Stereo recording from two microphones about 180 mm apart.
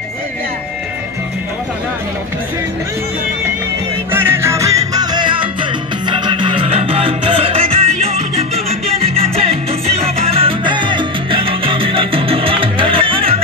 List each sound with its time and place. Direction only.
4.1 s music: 15° right (ahead or behind); by 13.4 s 30° right (ahead or behind)